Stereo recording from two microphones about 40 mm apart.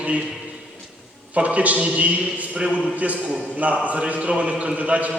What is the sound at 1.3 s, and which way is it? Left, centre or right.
A man's voice, right.